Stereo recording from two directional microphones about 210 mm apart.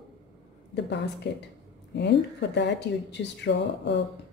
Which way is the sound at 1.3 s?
55° left (ahead or behind).